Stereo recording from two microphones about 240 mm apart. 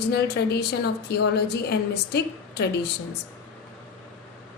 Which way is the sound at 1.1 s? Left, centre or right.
Left.